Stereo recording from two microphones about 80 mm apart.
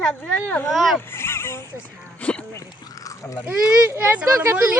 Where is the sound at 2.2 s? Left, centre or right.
Centre.